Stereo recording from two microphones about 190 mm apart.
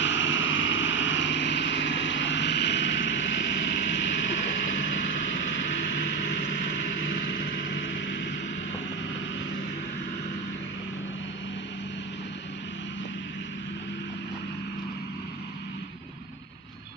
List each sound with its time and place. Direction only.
0.0 s vehicle: 75° left (ahead or behind)